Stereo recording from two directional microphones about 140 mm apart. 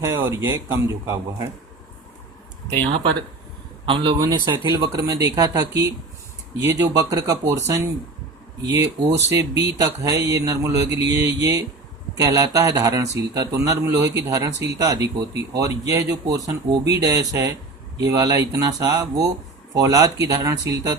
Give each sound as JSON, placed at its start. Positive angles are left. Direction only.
{"t": 0.0, "sound": "speech", "side_deg": -20}
{"t": 2.9, "sound": "speech", "side_deg": -40}
{"t": 9.3, "sound": "speech", "side_deg": -25}